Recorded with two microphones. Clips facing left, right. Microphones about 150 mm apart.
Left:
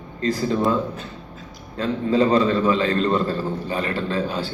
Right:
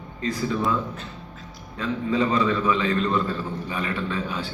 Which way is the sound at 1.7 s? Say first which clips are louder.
Left 4 dB; 35° left (ahead or behind).